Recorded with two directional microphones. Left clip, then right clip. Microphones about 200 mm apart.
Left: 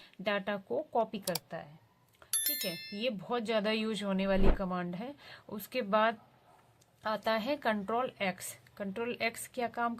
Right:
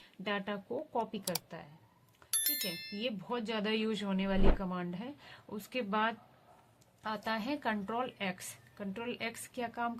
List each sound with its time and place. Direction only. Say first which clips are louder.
0.3 s speech: left 4 dB; 30° left (ahead or behind)
1.2 s speech: left 3 dB; centre (ahead or behind)
3.0 s speech: left 4 dB; 30° left (ahead or behind)